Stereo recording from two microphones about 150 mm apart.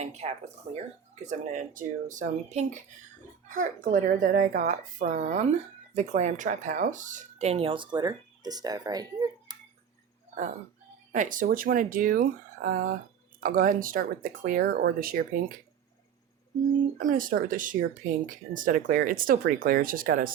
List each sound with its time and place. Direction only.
0.0 s speech: 45° right (ahead or behind); by 9.6 s 25° right (ahead or behind)
11.1 s speech: 60° right (ahead or behind)
17.0 s speech: 65° right (ahead or behind)